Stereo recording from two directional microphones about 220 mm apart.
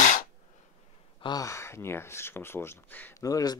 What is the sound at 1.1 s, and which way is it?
Speech, 20° left (ahead or behind).